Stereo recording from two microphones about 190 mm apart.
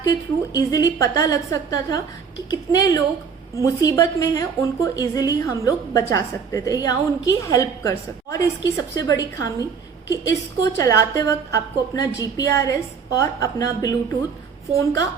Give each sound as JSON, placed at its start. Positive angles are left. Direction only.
{"t": 0.0, "sound": "a woman's voice", "side_deg": 20}